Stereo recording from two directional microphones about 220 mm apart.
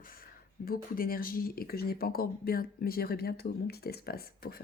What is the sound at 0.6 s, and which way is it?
Speech, 40° left (ahead or behind).